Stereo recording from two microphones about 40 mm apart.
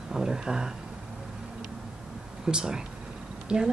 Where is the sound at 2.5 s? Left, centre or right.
Centre.